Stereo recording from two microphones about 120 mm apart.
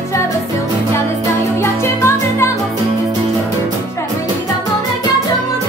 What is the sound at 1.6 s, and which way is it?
Music, 20° left (ahead or behind).